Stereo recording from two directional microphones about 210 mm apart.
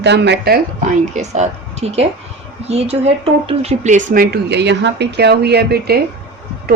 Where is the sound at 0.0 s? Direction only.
55° right (ahead or behind).